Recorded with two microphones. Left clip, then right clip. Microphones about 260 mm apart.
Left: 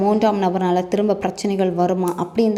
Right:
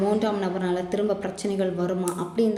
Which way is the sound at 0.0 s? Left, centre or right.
Left.